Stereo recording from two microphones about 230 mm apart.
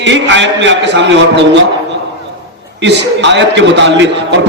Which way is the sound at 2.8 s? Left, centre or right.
Right.